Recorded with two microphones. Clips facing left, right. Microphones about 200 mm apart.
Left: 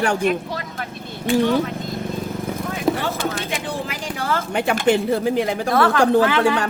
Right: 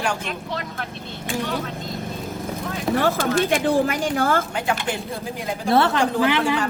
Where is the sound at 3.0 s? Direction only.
55° right (ahead or behind).